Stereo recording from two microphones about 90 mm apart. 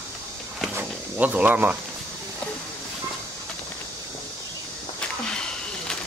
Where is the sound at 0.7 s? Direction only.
25° right (ahead or behind).